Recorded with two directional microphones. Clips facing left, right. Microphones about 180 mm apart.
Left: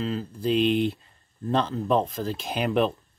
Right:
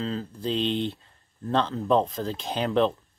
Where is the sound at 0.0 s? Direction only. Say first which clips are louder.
Left 2 dB; 5° left (ahead or behind).